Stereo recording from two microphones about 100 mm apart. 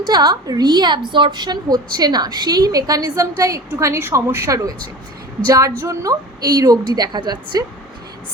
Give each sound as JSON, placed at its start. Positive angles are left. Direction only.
{"t": 0.1, "sound": "a woman's voice", "side_deg": -45}